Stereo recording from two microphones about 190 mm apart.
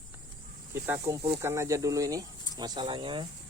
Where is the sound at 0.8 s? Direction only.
10° right (ahead or behind).